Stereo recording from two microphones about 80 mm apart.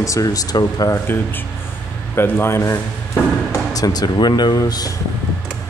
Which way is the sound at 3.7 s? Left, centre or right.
Left.